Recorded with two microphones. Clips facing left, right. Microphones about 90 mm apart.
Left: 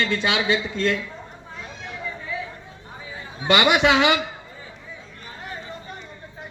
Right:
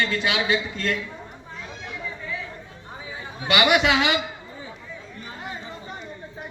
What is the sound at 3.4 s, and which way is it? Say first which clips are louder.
Speech: left 2 dB; 30° left (ahead or behind).